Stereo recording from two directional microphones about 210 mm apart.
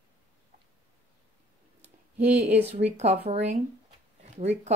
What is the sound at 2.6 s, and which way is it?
Speech, 30° right (ahead or behind).